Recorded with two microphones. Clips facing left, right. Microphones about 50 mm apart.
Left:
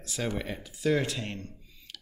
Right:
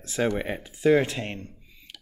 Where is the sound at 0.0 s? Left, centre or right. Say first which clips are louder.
Right 7 dB; right.